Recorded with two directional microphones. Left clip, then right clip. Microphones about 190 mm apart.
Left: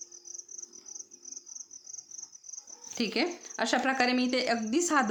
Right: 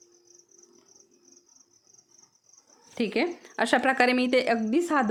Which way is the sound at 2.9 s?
25° right (ahead or behind).